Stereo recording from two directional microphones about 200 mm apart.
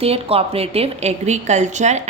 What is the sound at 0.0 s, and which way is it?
A woman's voice, 30° right (ahead or behind).